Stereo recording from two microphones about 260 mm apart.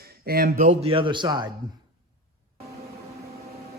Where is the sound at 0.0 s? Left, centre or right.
Right; by 1.5 s centre.